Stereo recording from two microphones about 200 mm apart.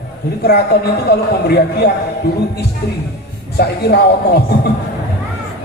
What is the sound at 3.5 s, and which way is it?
Speech, 55° left (ahead or behind).